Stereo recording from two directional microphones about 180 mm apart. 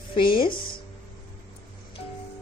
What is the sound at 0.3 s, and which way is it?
Speech, 55° left (ahead or behind).